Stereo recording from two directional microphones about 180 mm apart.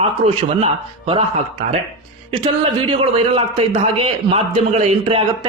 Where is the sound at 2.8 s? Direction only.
30° right (ahead or behind).